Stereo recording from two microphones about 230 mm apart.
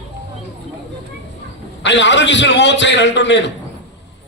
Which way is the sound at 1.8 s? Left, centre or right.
Left.